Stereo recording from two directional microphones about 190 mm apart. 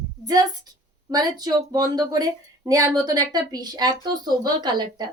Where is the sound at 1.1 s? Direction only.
20° right (ahead or behind).